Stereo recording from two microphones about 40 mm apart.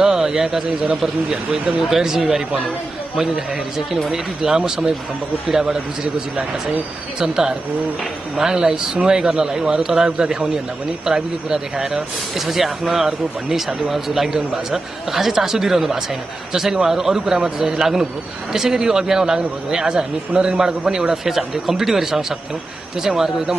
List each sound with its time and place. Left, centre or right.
0.0 s a sound: centre
0.3 s a man's voice: centre
4.4 s a man's voice: centre
7.2 s a man's voice: centre